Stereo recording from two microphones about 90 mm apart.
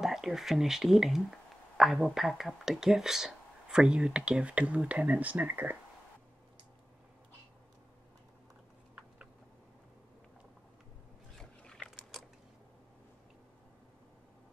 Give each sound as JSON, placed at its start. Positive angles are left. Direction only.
{"t": 0.0, "sound": "speech", "side_deg": -5}
{"t": 11.3, "sound": "biting", "side_deg": 5}